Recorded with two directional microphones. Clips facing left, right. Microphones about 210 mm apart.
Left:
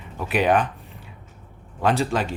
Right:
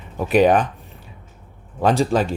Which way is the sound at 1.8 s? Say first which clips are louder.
Right 4 dB; 40° right (ahead or behind).